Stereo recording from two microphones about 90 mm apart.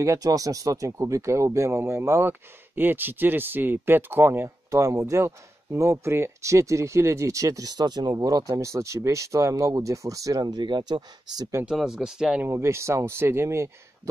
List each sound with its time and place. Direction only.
0.0 s speech: 35° right (ahead or behind)
11.6 s speech: 5° right (ahead or behind)
12.4 s speech: 30° right (ahead or behind)